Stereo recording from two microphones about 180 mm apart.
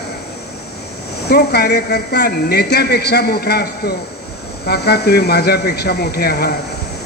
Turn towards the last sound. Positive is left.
turn(degrees=60)  # may be behind; listen again after turning